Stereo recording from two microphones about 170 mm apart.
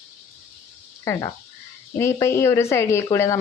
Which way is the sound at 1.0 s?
20° left (ahead or behind).